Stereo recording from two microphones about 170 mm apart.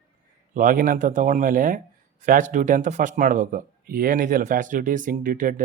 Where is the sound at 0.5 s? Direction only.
50° right (ahead or behind).